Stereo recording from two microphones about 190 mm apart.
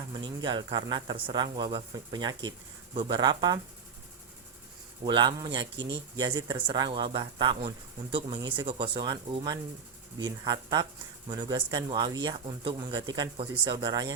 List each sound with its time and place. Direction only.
0.1 s a man's voice: 25° right (ahead or behind)
5.0 s a man's voice: 25° right (ahead or behind)